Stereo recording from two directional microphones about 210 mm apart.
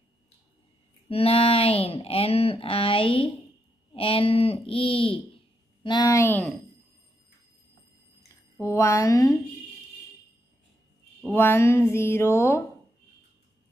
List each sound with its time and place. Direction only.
1.0 s speech: 25° left (ahead or behind); by 6.5 s 10° left (ahead or behind)
8.6 s speech: 15° left (ahead or behind)
11.1 s speech: 10° left (ahead or behind)